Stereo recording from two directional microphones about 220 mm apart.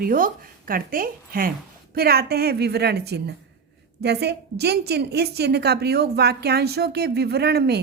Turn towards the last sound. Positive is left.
turn(degrees=-45)  # may be behind; listen again after turning